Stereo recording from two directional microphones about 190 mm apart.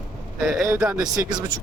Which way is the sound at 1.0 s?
20° right (ahead or behind).